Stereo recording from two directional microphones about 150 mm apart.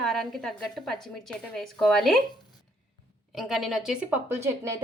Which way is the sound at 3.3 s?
Centre (ahead or behind).